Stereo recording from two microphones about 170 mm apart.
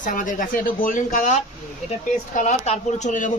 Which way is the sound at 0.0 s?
50° left (ahead or behind).